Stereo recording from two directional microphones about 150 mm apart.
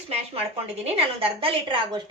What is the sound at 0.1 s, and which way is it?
A woman's voice, 40° right (ahead or behind).